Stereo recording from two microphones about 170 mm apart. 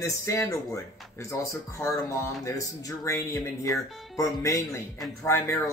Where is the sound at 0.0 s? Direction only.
15° left (ahead or behind).